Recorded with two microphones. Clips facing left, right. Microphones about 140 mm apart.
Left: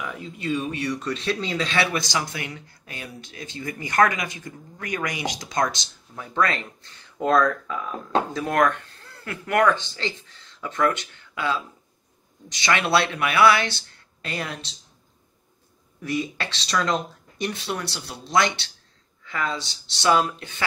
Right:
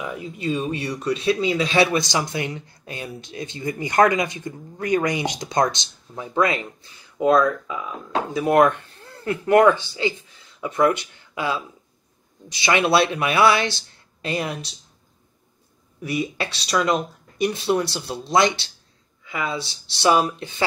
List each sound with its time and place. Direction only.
0.0 s speech: 20° right (ahead or behind)
8.5 s speech: 20° right (ahead or behind)
12.6 s speech: 15° right (ahead or behind)
16.0 s speech: 15° right (ahead or behind)